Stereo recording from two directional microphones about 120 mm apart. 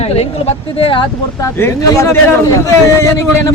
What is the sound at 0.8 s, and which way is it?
Speech, 45° left (ahead or behind).